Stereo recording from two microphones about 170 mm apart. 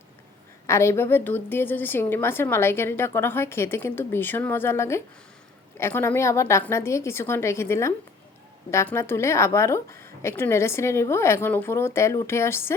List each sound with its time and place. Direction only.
0.7 s a woman's voice: 15° left (ahead or behind)